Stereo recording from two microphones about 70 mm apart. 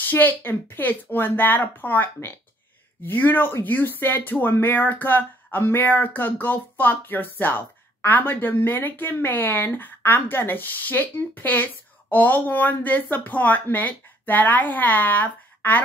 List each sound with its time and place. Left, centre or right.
0.0 s speech: left